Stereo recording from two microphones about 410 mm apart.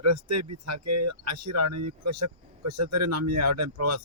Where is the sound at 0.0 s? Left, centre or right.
Right.